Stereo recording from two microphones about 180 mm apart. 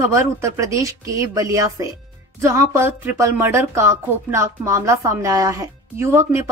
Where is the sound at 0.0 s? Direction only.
15° right (ahead or behind).